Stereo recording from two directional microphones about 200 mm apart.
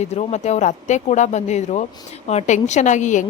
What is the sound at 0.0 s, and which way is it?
Speech, 35° left (ahead or behind).